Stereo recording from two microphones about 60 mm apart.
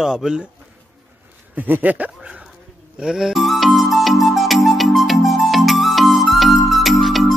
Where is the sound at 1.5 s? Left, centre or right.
Right.